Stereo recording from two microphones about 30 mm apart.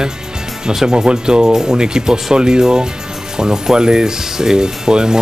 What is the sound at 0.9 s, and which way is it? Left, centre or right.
Speech, right.